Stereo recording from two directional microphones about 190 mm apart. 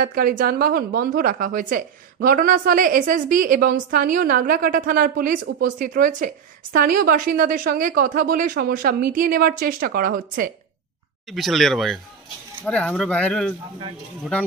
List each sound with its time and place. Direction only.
0.0 s a woman's voice: 50° right (ahead or behind)
11.2 s speech: centre (ahead or behind)